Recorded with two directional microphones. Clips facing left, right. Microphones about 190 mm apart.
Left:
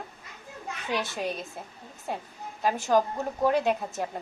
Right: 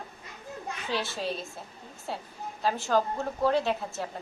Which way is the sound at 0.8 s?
15° left (ahead or behind).